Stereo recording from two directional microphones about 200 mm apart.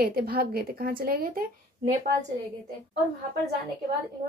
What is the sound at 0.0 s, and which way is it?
A woman's voice, 50° right (ahead or behind).